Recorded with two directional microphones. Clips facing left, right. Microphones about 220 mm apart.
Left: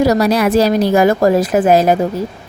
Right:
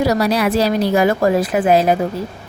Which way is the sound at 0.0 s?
45° left (ahead or behind).